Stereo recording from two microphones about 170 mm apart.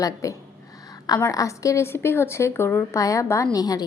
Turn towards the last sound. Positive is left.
turn(degrees=20)  # may be behind; listen again after turning